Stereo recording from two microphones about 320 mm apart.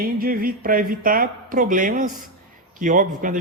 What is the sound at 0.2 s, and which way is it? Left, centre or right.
A man's voice, right.